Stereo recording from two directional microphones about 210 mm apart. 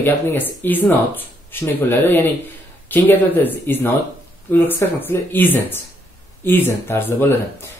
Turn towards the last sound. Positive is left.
turn(degrees=10)  # may be behind; listen again after turning